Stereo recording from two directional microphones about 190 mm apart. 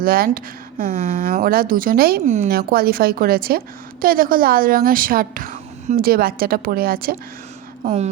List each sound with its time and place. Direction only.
0.0 s speech: 50° right (ahead or behind)
7.9 s speech: 35° right (ahead or behind)